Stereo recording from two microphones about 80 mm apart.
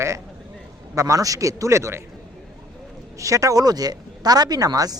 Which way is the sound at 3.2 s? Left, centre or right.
Right.